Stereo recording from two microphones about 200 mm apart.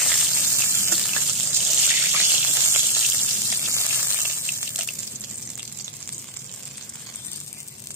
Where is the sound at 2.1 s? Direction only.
10° right (ahead or behind).